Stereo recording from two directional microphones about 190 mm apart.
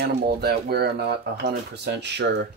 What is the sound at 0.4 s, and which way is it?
Speech, 55° right (ahead or behind).